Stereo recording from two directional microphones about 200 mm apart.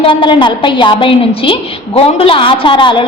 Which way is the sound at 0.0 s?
25° left (ahead or behind).